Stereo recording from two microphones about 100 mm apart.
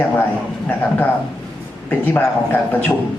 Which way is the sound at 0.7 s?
15° left (ahead or behind).